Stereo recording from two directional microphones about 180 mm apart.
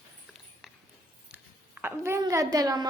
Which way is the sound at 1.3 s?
10° right (ahead or behind).